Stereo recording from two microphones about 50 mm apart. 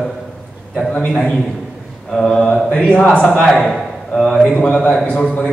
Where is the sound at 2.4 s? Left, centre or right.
Left.